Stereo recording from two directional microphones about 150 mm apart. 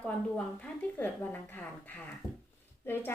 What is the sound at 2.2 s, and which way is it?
Speech, 25° left (ahead or behind).